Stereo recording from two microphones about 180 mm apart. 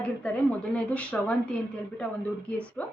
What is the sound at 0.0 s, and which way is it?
A woman's voice, 5° left (ahead or behind).